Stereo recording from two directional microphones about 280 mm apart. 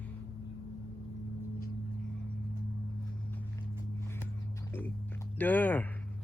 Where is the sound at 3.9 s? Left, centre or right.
Centre.